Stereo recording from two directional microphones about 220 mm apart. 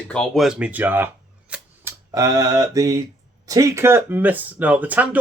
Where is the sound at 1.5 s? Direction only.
10° right (ahead or behind).